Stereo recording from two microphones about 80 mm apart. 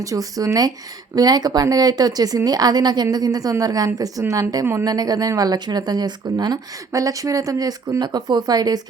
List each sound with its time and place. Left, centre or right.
0.0 s a woman's voice: right
4.6 s speech: right
4.9 s speech: right
6.9 s speech: right